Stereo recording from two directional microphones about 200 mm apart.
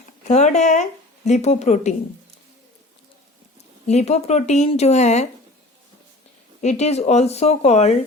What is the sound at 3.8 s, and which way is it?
A woman's voice, 35° left (ahead or behind).